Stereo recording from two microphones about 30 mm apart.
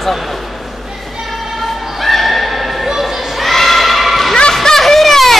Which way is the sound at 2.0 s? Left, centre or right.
Centre.